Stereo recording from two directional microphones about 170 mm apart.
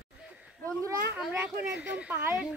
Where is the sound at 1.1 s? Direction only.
10° right (ahead or behind).